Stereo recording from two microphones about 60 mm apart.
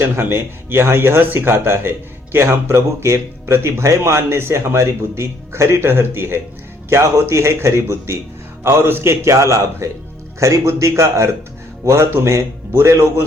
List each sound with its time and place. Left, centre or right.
0.0 s speech: right
9.2 s a man's voice: right